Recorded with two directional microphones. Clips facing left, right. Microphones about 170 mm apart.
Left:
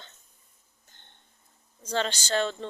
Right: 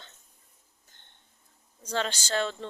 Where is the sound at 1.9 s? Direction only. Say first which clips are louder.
Left 2 dB; 5° right (ahead or behind).